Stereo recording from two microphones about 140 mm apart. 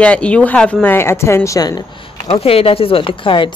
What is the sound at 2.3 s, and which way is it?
Speech, 45° left (ahead or behind).